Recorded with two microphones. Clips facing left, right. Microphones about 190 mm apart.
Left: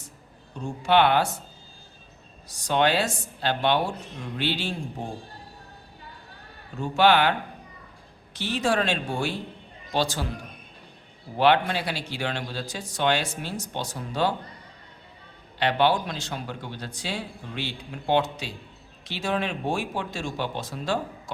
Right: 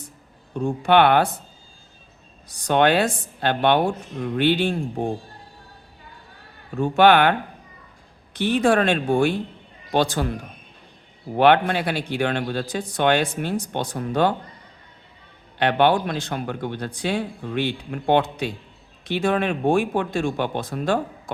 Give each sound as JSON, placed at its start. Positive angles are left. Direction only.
{"t": 0.5, "sound": "speech", "side_deg": -55}
{"t": 2.5, "sound": "speech", "side_deg": -55}
{"t": 6.7, "sound": "speech", "side_deg": -55}
{"t": 11.3, "sound": "speech", "side_deg": -55}
{"t": 15.5, "sound": "speech", "side_deg": -55}